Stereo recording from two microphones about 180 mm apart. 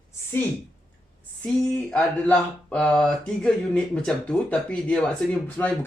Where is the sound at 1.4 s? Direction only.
5° left (ahead or behind).